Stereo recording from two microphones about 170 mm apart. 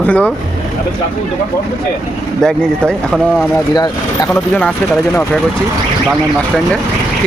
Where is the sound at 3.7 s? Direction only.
25° left (ahead or behind).